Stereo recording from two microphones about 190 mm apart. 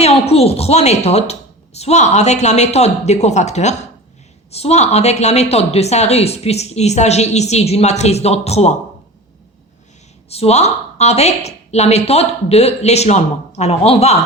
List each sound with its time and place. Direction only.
0.0 s a woman's voice: 30° left (ahead or behind)
10.2 s a woman's voice: 35° left (ahead or behind)